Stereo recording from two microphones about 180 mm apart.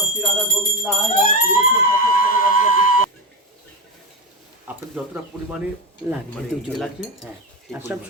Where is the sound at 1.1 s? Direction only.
50° left (ahead or behind).